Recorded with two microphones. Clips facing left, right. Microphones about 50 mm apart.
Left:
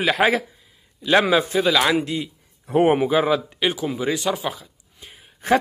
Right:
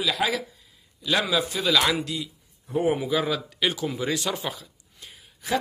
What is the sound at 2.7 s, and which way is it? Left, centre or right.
Speech, left.